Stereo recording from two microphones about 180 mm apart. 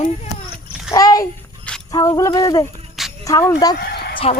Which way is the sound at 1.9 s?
20° left (ahead or behind).